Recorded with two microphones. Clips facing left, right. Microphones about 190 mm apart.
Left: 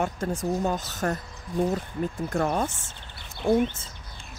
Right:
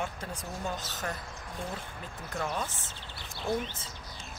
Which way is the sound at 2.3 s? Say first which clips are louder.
Left 7 dB; 50° left (ahead or behind).